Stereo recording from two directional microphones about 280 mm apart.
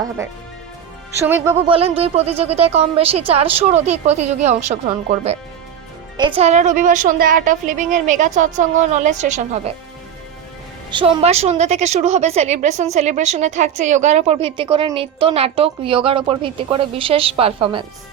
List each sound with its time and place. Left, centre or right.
1.5 s a woman's voice: centre
10.9 s a woman's voice: centre